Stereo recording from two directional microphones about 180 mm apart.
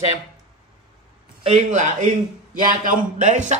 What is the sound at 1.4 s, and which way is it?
A man's voice, 35° right (ahead or behind).